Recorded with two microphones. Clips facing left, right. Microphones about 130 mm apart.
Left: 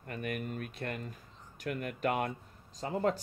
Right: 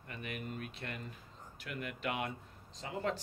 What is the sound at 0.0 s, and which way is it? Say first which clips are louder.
Speech: left 6 dB; 50° left (ahead or behind).